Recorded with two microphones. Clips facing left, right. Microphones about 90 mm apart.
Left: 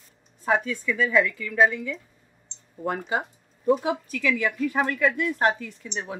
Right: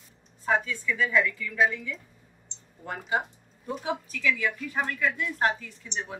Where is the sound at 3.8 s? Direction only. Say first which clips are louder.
Left 4 dB; 70° left (ahead or behind).